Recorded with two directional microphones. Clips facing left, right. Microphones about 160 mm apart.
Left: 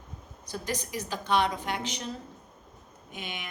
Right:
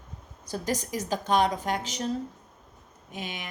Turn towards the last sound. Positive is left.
turn(degrees=-35)  # may be behind; listen again after turning